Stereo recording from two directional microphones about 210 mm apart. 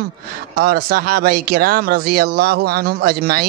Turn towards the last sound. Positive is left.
turn(degrees=-45)  # may be behind; listen again after turning